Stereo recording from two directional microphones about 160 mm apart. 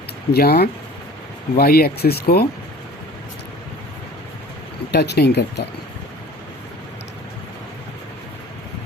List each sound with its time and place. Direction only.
0.3 s speech: 80° left
4.9 s speech: 90° left